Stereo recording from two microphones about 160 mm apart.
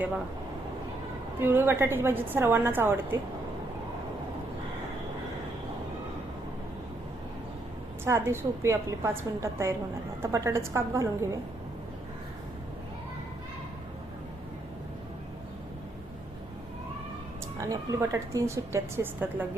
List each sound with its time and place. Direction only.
1.4 s a woman's voice: 15° right (ahead or behind)
8.0 s a woman's voice: 15° right (ahead or behind)
17.6 s a woman's voice: 20° right (ahead or behind)